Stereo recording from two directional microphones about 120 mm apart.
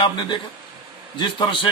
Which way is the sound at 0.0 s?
40° left (ahead or behind).